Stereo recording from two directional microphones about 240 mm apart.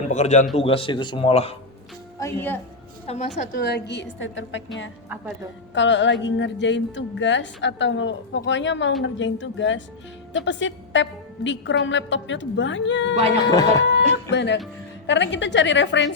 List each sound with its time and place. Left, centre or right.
0.1 s speech: left
2.1 s a woman's voice: centre
3.1 s a woman's voice: left
5.0 s a woman's voice: centre
5.7 s a woman's voice: left
13.4 s speech: centre
14.1 s a woman's voice: left